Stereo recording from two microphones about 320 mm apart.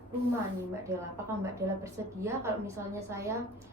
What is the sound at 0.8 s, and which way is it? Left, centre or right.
A woman's voice, centre.